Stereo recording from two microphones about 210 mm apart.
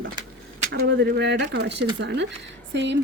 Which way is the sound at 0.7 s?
55° right (ahead or behind).